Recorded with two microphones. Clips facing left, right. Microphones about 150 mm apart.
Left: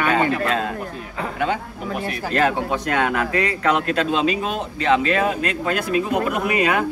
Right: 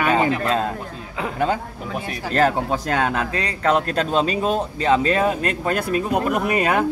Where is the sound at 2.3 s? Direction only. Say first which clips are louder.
Right 2 dB; 35° right (ahead or behind).